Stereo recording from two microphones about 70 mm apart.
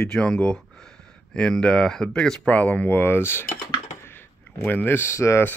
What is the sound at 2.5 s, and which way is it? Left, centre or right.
Speech, left.